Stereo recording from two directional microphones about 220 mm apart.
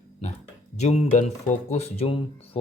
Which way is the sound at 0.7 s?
30° left (ahead or behind).